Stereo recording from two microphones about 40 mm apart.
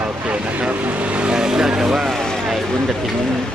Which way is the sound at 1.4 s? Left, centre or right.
Centre.